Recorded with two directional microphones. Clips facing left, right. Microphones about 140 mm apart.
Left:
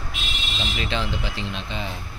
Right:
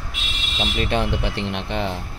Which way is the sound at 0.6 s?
50° right (ahead or behind).